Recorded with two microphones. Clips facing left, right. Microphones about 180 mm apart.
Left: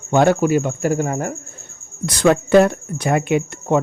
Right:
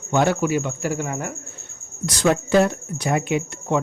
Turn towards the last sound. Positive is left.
turn(degrees=55)  # may be behind; listen again after turning